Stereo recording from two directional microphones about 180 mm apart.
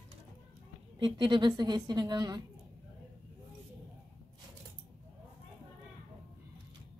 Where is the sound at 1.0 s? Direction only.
30° right (ahead or behind).